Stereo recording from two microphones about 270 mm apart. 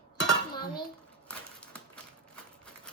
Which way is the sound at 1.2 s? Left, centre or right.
Centre.